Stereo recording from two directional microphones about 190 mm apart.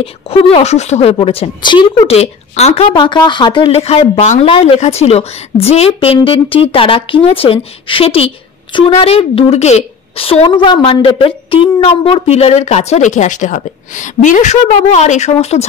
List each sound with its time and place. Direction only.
0.0 s a woman's voice: 30° left (ahead or behind)